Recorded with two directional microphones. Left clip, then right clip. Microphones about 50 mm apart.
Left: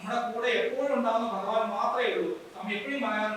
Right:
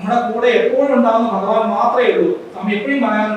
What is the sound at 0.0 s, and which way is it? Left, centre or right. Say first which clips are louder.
A man's voice: right 14 dB; centre.